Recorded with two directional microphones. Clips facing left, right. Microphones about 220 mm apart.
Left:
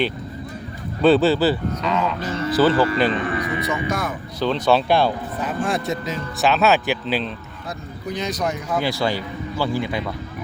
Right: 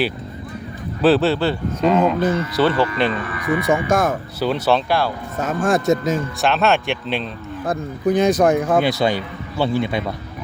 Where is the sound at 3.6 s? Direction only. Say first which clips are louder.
Right 6 dB; 50° right (ahead or behind).